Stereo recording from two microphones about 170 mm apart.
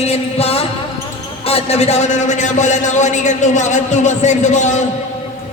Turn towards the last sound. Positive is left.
turn(degrees=45)  # may be behind; listen again after turning